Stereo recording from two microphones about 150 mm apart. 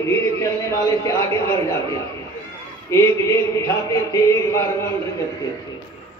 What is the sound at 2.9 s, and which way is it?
A man's voice, 20° left (ahead or behind).